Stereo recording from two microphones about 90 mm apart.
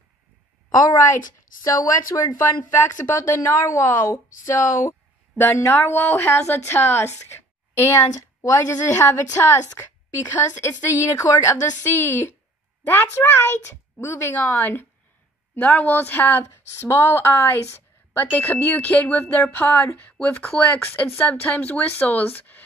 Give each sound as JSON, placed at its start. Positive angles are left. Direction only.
{"t": 1.6, "sound": "speech", "side_deg": 40}